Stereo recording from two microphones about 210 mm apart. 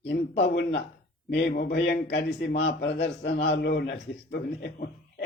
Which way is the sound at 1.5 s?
50° left (ahead or behind).